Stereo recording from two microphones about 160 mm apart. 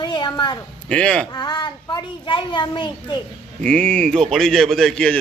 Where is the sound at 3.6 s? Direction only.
5° left (ahead or behind).